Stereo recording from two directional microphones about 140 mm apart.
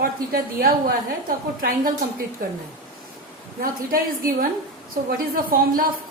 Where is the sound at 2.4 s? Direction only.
90° right.